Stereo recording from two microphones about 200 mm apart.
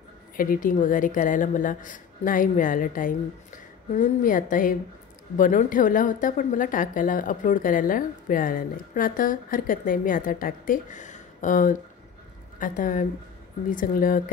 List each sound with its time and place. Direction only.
0.4 s a woman's voice: 45° left (ahead or behind)